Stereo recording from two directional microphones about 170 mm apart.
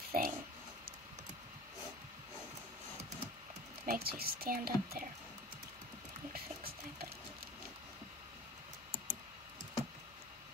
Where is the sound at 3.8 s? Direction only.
60° right (ahead or behind).